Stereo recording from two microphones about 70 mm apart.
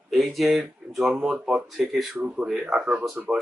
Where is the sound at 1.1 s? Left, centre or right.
Centre.